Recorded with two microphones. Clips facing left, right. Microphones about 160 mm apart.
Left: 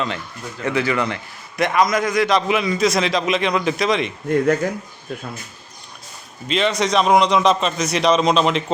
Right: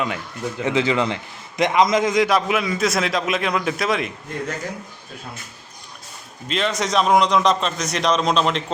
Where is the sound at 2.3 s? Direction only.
Centre (ahead or behind).